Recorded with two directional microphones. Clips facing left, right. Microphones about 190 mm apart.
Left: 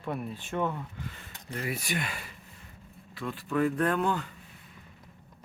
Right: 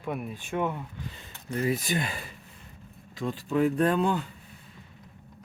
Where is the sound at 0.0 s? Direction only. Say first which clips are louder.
Right 1 dB; 10° right (ahead or behind).